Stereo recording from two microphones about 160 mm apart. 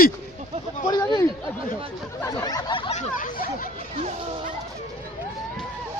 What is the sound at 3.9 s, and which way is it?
Speech, 55° right (ahead or behind).